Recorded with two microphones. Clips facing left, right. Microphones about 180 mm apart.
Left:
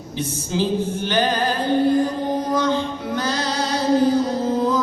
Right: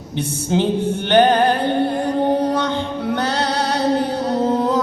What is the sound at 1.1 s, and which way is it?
Music, 65° right (ahead or behind).